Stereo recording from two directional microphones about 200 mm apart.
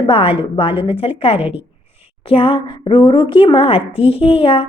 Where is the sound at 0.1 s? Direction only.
25° left (ahead or behind).